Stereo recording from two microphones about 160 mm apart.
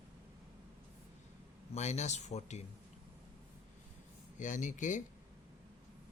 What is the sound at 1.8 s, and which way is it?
Speech, 45° left (ahead or behind).